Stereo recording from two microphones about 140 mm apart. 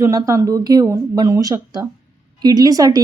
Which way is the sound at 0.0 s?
25° right (ahead or behind).